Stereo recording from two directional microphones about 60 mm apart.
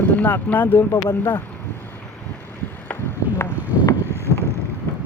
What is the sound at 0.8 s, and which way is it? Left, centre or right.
Speech, left.